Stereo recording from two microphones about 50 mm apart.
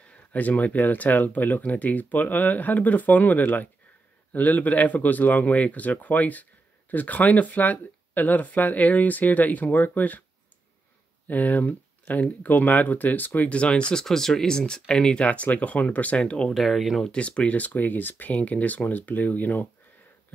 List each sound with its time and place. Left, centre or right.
0.3 s speech: left
11.2 s speech: left
13.5 s speech: left
14.0 s speech: centre
15.2 s speech: left
16.5 s speech: centre
17.0 s speech: left